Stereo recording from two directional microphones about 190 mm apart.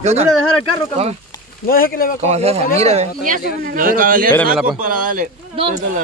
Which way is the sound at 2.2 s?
35° right (ahead or behind).